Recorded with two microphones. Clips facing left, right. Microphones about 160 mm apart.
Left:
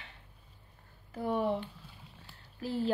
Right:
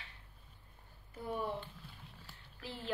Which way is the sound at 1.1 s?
75° left (ahead or behind).